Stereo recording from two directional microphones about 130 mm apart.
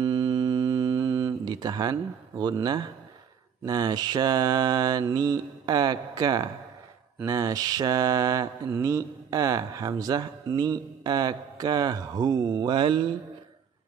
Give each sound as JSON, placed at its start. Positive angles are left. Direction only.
{"t": 0.0, "sound": "mantra", "side_deg": -30}
{"t": 1.5, "sound": "speech", "side_deg": -30}
{"t": 7.2, "sound": "mantra", "side_deg": -25}
{"t": 8.7, "sound": "speech", "side_deg": -25}